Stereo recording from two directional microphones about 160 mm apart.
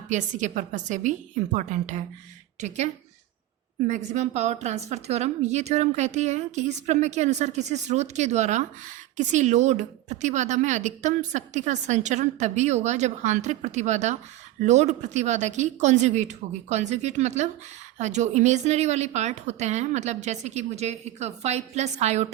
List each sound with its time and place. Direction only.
0.1 s a woman's voice: 50° right (ahead or behind)